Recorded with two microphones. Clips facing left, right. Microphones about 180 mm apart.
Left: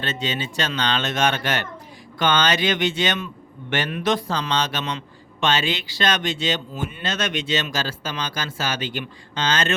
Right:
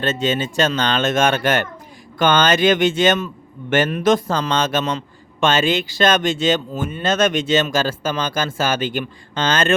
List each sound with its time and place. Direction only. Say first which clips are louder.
0.0 s a man's voice: right 7 dB; 45° right (ahead or behind)